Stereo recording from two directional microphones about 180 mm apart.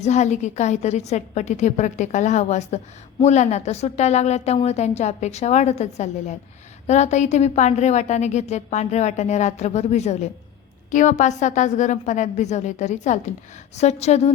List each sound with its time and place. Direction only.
0.0 s a woman's voice: 40° left (ahead or behind)